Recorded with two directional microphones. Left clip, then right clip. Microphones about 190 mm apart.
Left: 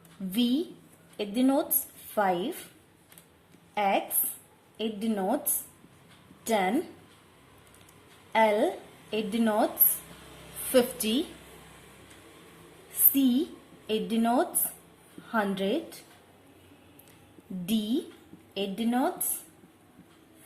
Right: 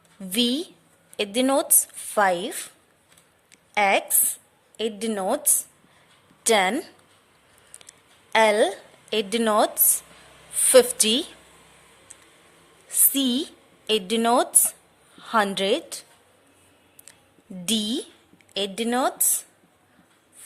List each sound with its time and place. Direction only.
0.3 s a woman's voice: 45° right (ahead or behind)
3.8 s a woman's voice: 45° right (ahead or behind)
6.4 s a woman's voice: 45° right (ahead or behind)
7.9 s a sound: 45° right (ahead or behind)
10.7 s a woman's voice: 50° right (ahead or behind)
13.1 s a woman's voice: 45° right (ahead or behind)
17.7 s a woman's voice: 50° right (ahead or behind)